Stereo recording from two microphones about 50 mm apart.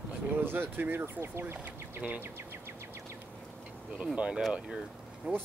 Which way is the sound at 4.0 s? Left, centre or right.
Centre.